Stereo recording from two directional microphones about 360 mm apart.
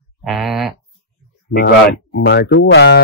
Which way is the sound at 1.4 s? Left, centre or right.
Left.